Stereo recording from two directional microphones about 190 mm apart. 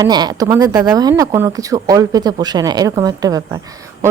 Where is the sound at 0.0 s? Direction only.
20° right (ahead or behind).